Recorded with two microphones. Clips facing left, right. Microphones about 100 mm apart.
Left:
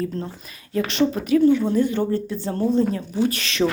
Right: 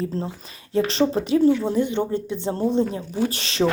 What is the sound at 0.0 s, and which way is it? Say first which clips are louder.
A woman's voice: even; 25° right (ahead or behind).